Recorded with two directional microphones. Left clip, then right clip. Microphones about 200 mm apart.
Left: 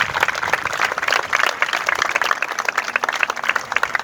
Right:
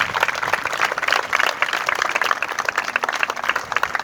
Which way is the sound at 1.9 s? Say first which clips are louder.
Left 1 dB; centre (ahead or behind).